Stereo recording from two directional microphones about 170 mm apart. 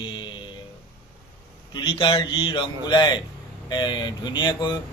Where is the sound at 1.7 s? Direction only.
30° left (ahead or behind).